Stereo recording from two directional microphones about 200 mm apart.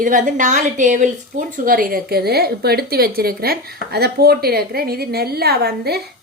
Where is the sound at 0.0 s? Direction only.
40° right (ahead or behind).